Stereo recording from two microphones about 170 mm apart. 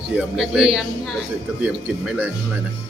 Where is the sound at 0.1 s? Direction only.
5° right (ahead or behind).